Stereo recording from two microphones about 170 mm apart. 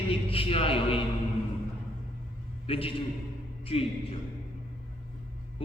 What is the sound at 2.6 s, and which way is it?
A man's voice, 35° left (ahead or behind).